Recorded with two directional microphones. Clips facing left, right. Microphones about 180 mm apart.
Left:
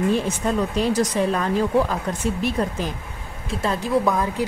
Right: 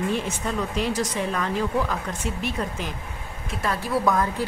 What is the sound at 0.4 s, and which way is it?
A woman's voice, 35° left (ahead or behind).